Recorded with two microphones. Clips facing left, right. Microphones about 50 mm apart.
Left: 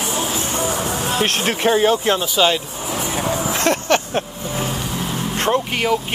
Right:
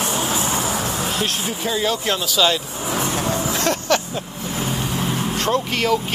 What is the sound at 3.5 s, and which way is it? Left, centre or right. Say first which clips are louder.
Vehicle: left 3 dB; left.